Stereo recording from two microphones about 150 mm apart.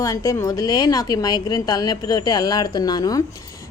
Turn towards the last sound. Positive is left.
turn(degrees=25)  # may be behind; listen again after turning